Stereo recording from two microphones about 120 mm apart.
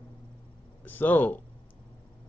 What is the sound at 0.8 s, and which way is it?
Speech, 15° left (ahead or behind).